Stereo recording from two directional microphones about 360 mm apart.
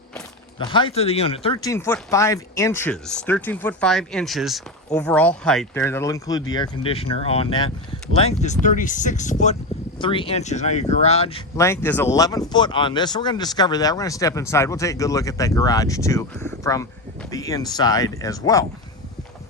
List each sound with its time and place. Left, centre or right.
0.6 s speech: centre